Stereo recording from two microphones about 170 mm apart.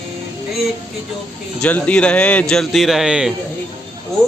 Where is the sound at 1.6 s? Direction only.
5° left (ahead or behind).